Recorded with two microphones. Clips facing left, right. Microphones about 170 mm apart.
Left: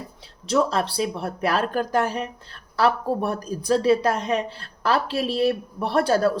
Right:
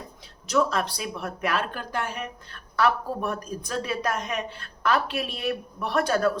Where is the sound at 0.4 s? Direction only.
30° left (ahead or behind).